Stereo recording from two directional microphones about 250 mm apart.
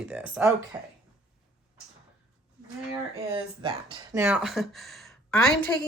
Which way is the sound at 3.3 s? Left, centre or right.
Centre.